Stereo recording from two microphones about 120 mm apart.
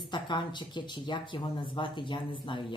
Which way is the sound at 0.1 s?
40° left (ahead or behind).